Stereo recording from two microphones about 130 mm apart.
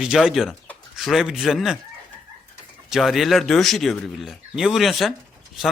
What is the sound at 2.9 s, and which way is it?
Speech, centre (ahead or behind).